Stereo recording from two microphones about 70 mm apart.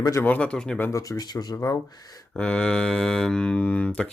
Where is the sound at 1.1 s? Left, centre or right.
Left.